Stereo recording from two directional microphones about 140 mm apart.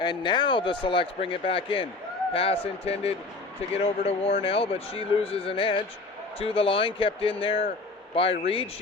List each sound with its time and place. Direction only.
0.0 s speech: 35° left (ahead or behind)